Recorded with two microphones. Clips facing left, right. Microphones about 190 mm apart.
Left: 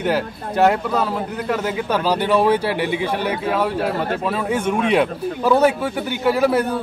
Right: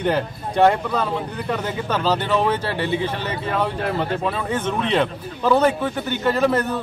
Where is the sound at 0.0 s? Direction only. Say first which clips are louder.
Left 1 dB; 5° left (ahead or behind).